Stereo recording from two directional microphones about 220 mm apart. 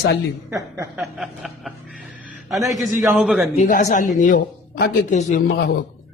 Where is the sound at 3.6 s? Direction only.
35° left (ahead or behind).